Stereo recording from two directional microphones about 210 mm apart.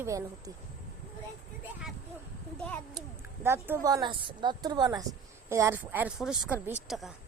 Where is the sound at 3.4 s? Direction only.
10° right (ahead or behind).